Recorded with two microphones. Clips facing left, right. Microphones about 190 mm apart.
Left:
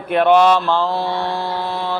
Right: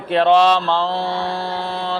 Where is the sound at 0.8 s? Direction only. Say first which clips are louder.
Left 1 dB; 10° left (ahead or behind).